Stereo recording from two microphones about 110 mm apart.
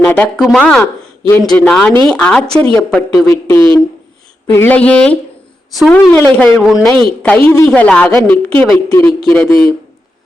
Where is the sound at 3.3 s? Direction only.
25° left (ahead or behind).